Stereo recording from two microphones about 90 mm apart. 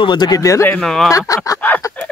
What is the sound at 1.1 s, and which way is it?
Speech, 40° left (ahead or behind).